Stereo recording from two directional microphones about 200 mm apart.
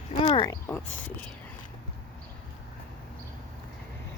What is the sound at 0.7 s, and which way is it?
Speech, 10° left (ahead or behind).